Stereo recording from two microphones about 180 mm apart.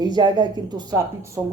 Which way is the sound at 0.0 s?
25° right (ahead or behind).